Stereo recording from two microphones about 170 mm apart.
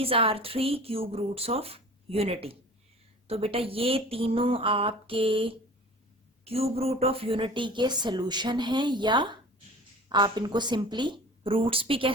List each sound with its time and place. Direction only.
0.0 s a woman's voice: 35° right (ahead or behind)